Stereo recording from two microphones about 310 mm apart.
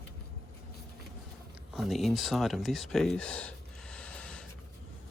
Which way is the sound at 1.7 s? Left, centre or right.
Centre.